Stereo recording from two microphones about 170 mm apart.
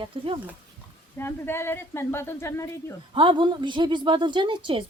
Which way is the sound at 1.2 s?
15° left (ahead or behind).